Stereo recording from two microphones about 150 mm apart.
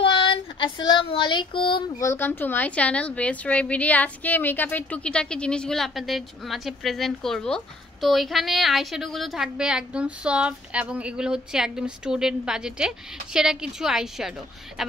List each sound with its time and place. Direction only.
0.0 s child singing: 35° left (ahead or behind)
2.0 s a woman's voice: 15° left (ahead or behind); by 14.9 s 5° right (ahead or behind)